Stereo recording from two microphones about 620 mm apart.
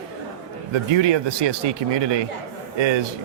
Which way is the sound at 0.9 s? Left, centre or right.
Right.